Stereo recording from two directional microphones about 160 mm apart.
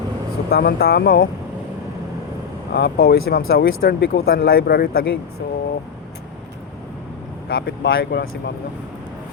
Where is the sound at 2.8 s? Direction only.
80° left.